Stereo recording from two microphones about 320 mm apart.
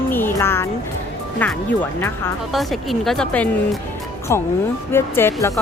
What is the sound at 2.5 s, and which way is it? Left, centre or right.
Speech, centre.